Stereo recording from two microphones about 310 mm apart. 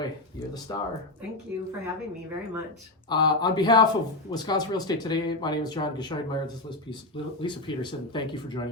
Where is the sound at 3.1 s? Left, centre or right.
Centre.